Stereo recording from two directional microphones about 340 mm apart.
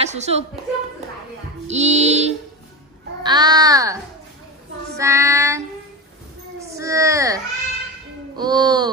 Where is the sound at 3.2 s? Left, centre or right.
Centre.